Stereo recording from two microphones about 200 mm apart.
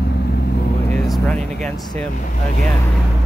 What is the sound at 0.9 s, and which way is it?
Speech, centre (ahead or behind).